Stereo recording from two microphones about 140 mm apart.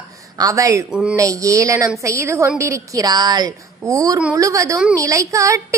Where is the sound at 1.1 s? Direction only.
25° right (ahead or behind).